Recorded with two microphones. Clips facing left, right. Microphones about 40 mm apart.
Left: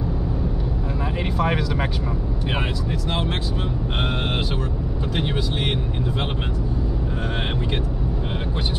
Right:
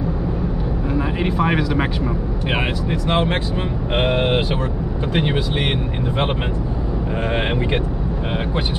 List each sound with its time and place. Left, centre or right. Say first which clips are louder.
0.9 s speech: right 5 dB; centre
2.5 s speech: right 5 dB; right
4.0 s speech: right 8 dB; right